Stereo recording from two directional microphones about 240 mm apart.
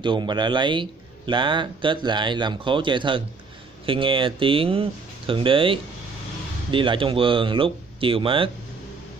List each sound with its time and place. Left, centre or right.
0.0 s speech: centre